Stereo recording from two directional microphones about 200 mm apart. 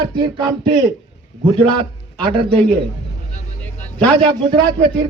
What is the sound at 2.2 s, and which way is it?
Speech, 25° right (ahead or behind).